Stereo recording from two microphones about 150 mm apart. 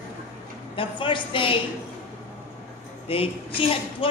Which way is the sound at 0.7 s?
35° left (ahead or behind).